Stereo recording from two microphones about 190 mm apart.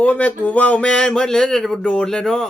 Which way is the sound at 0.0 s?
10° left (ahead or behind).